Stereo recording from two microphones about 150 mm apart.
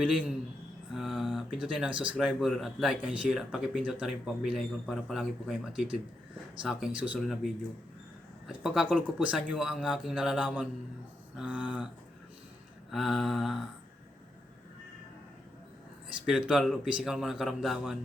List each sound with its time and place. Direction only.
0.0 s speech: 5° right (ahead or behind)
11.3 s a sound: 5° right (ahead or behind)
12.9 s speech: centre (ahead or behind)
16.2 s speech: 5° right (ahead or behind)